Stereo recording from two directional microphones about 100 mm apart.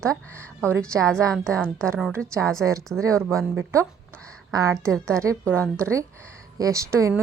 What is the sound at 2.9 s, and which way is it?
Mantra, 35° right (ahead or behind).